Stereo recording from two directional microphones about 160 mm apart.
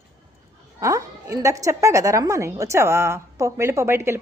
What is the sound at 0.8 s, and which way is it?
A woman's voice, 20° right (ahead or behind).